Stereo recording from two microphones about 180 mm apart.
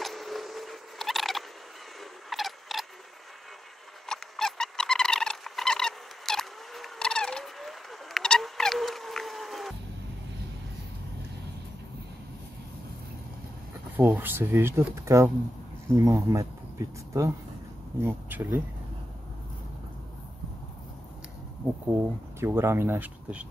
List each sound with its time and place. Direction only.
0.0 s turkey: centre (ahead or behind)
2.2 s a sound: centre (ahead or behind)
4.0 s patter: 5° left (ahead or behind)
13.9 s speech: 10° right (ahead or behind)
22.4 s speech: 15° right (ahead or behind)